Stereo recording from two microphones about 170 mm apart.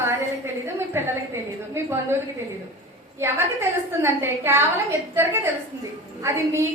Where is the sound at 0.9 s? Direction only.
15° right (ahead or behind).